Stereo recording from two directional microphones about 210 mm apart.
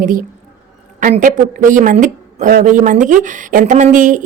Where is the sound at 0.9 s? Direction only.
40° right (ahead or behind).